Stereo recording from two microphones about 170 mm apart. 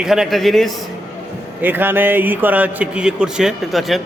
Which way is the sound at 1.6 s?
10° right (ahead or behind).